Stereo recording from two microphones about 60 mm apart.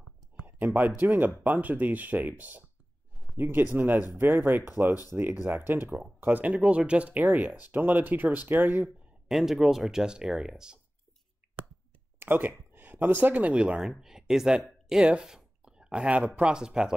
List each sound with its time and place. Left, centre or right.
0.5 s speech: right
6.4 s speech: centre
9.3 s speech: centre
11.4 s a sound: right
12.2 s speech: right
13.7 s speech: centre
15.3 s a sound: centre
16.3 s speech: centre